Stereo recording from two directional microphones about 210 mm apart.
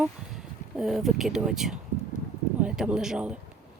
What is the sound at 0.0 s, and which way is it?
Speech, centre (ahead or behind).